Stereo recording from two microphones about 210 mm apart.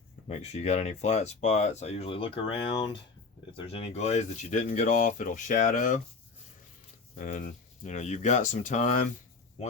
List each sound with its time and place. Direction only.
0.3 s speech: 30° left (ahead or behind)
7.2 s speech: 40° left (ahead or behind)